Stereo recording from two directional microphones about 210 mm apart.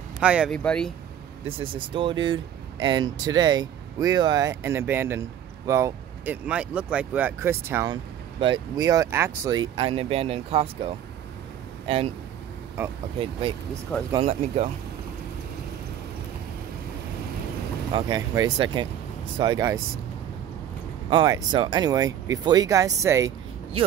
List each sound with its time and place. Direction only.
0.2 s speech: 5° right (ahead or behind)
2.0 s speech: 25° right (ahead or behind)
11.9 s speech: 25° right (ahead or behind)
13.2 s speech: 25° right (ahead or behind)
17.9 s speech: 20° right (ahead or behind)
21.1 s speech: 20° right (ahead or behind)